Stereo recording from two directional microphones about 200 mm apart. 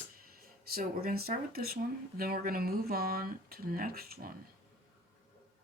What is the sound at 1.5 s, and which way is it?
Speech, 50° right (ahead or behind).